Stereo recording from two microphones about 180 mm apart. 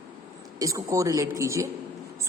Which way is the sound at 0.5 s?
20° right (ahead or behind).